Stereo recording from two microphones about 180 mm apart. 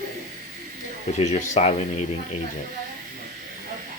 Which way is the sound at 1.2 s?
40° left (ahead or behind).